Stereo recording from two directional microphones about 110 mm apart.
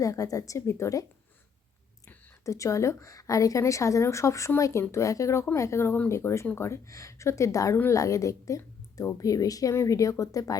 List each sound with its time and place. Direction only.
0.0 s a woman's voice: 30° left (ahead or behind)
2.4 s a woman's voice: 30° left (ahead or behind)